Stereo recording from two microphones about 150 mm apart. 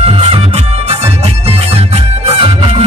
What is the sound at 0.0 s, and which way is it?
Music, 40° right (ahead or behind).